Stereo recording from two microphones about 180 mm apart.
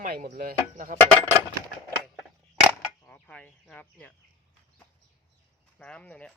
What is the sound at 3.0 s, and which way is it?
Speech, 10° left (ahead or behind).